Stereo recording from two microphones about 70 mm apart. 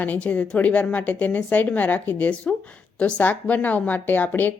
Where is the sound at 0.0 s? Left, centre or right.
Left.